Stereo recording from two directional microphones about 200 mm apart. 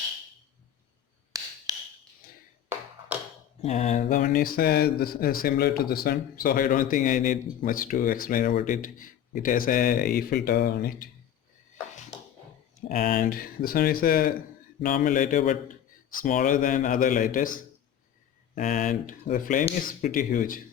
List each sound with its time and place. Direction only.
1.3 s a sound: 15° right (ahead or behind)
3.6 s speech: 35° left (ahead or behind); by 11.1 s 50° left (ahead or behind)
12.9 s speech: 40° left (ahead or behind)